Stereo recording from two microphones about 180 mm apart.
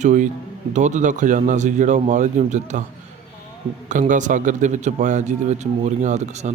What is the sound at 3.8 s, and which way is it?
A man's voice, 45° right (ahead or behind).